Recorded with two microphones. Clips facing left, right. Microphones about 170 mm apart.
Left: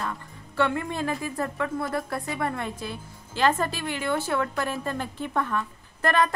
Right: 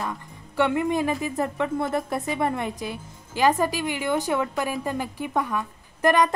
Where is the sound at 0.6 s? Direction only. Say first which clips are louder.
Right 4 dB; 15° right (ahead or behind).